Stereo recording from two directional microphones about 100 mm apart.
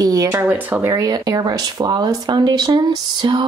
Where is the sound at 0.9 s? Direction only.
35° right (ahead or behind).